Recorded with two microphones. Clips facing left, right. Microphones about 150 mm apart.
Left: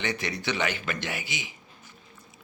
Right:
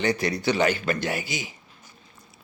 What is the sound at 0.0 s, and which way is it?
A man's voice, 35° right (ahead or behind).